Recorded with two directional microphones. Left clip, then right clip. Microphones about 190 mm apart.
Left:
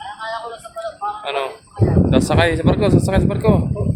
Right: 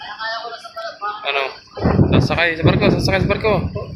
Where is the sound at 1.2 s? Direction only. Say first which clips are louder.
Right 4 dB; 20° left (ahead or behind).